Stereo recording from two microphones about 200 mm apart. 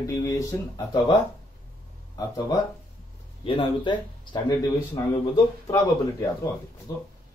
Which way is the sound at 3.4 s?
25° left (ahead or behind).